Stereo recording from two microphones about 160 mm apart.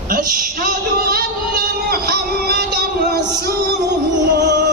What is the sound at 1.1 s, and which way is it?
Music, 70° right (ahead or behind).